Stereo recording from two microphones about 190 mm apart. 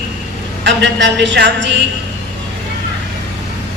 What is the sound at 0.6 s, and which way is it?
A woman's voice, 70° right (ahead or behind).